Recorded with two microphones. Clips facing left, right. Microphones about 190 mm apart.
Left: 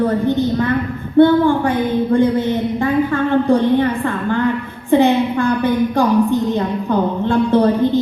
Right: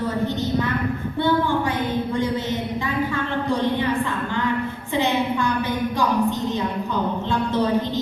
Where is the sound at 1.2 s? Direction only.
55° left (ahead or behind).